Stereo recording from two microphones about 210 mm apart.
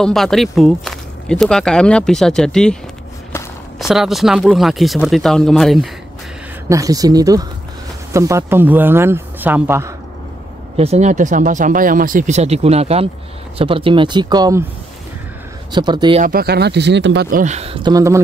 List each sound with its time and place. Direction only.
0.0 s speech: centre (ahead or behind)
6.7 s speech: 15° right (ahead or behind)
10.8 s speech: 30° right (ahead or behind)
15.7 s speech: 20° right (ahead or behind)
16.2 s speech: 45° right (ahead or behind)
17.9 s speech: 15° right (ahead or behind)